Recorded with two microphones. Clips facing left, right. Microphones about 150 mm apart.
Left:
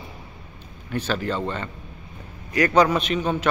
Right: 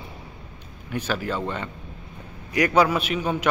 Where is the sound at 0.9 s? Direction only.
10° right (ahead or behind).